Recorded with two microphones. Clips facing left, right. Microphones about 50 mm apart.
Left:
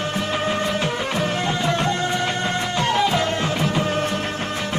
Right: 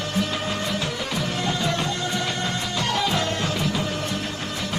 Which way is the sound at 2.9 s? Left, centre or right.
Left.